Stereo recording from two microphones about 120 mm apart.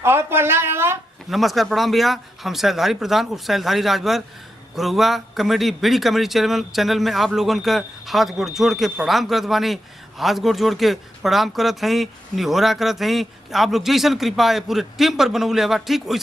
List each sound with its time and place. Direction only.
0.0 s a woman's voice: 20° right (ahead or behind)
1.3 s speech: centre (ahead or behind)